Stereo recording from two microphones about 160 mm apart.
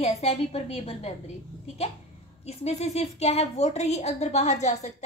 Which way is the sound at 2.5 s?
40° left (ahead or behind).